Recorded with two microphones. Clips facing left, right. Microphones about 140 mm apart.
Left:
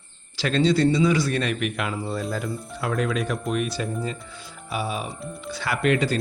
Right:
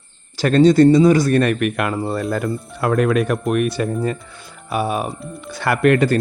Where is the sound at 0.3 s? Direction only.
45° right (ahead or behind).